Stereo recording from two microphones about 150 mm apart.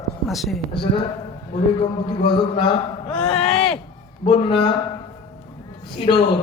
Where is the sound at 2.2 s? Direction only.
35° left (ahead or behind).